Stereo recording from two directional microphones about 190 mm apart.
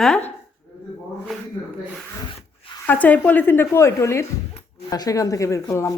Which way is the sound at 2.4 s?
25° left (ahead or behind).